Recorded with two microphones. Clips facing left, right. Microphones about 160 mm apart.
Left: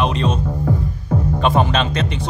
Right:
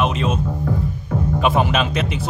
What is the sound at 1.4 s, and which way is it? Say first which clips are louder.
Speech: even; 5° right (ahead or behind).